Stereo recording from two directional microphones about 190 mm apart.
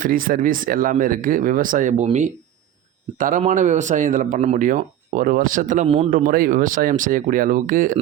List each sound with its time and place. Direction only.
0.0 s speech: 45° right (ahead or behind)
6.1 s speech: 45° right (ahead or behind)